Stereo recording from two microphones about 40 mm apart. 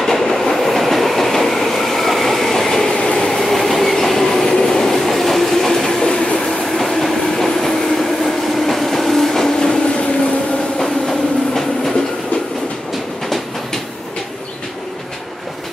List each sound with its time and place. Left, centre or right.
0.0 s train: centre
3.3 s train: centre; by 6.3 s left
7.0 s train: centre
8.6 s a sound: centre
10.8 s train: centre